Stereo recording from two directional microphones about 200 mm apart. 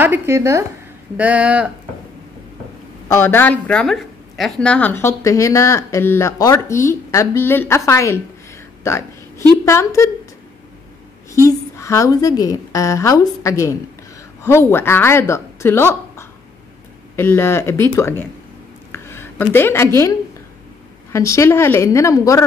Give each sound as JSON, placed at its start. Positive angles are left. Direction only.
{"t": 0.0, "sound": "speech", "side_deg": -10}
{"t": 3.1, "sound": "speech", "side_deg": 10}
{"t": 11.3, "sound": "speech", "side_deg": 15}
{"t": 18.9, "sound": "a sound", "side_deg": 10}
{"t": 19.5, "sound": "speech", "side_deg": 10}